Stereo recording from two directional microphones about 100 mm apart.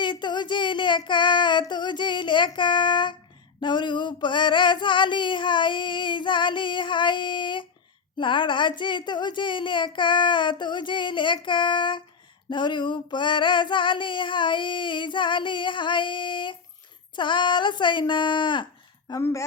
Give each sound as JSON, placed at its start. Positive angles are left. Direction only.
{"t": 0.0, "sound": "child singing", "side_deg": 50}
{"t": 3.6, "sound": "a sound", "side_deg": 50}
{"t": 8.2, "sound": "female singing", "side_deg": 55}
{"t": 19.2, "sound": "a woman's voice", "side_deg": 30}